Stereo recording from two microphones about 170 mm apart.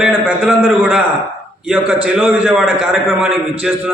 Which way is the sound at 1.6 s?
5° right (ahead or behind).